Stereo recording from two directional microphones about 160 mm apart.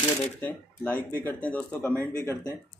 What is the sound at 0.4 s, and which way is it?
Speech, 10° left (ahead or behind).